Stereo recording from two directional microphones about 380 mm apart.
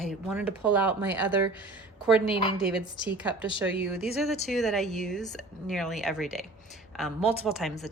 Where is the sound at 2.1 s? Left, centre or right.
Centre.